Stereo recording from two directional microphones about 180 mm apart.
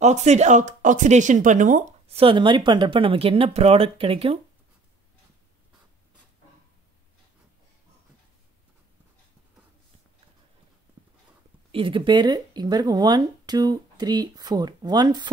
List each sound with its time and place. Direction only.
0.0 s speech: 40° right (ahead or behind)
2.1 s speech: 30° right (ahead or behind)
11.7 s speech: 30° right (ahead or behind)